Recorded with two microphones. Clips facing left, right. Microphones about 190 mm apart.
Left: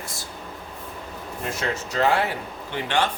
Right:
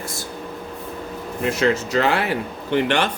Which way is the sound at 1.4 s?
80° right.